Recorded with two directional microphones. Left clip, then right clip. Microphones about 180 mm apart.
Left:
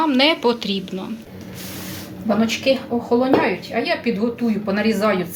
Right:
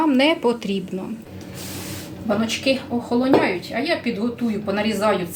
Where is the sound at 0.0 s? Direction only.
10° right (ahead or behind).